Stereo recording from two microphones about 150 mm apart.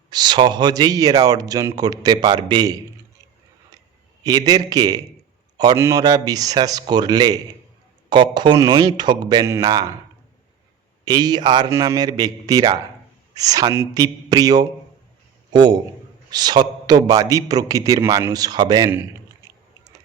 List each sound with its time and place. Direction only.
0.1 s speech: 30° right (ahead or behind)
4.2 s speech: 25° right (ahead or behind)
11.0 s speech: 25° right (ahead or behind)
16.3 s speech: 25° right (ahead or behind)